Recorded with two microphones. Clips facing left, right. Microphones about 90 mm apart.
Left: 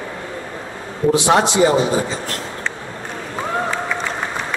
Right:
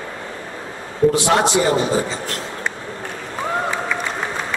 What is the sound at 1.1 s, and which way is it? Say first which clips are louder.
A man's voice: left 1 dB; 20° left (ahead or behind).